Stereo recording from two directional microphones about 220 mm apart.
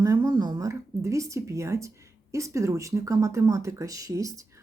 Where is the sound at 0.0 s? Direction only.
15° right (ahead or behind).